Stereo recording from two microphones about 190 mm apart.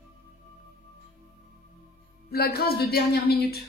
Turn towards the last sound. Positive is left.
turn(degrees=55)  # may be behind; listen again after turning